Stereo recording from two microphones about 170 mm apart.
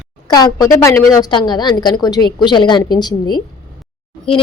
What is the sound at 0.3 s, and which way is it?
A woman's voice, 25° left (ahead or behind).